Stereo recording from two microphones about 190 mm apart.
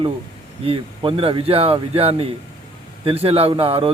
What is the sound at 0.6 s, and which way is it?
A man's voice, 30° right (ahead or behind).